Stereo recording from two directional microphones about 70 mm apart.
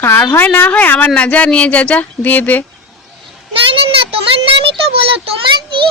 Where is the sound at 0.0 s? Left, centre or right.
Left.